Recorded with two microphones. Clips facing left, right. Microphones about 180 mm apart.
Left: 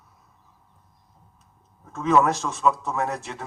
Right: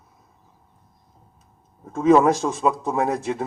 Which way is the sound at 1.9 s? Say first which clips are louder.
Right 5 dB; 30° right (ahead or behind).